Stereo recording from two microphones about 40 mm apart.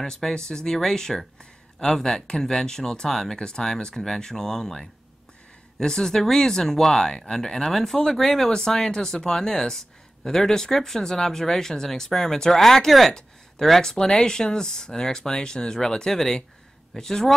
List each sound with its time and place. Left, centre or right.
0.0 s speech: centre